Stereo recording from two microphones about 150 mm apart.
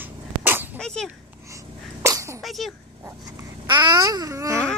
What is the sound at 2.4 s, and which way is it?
Speech, centre (ahead or behind).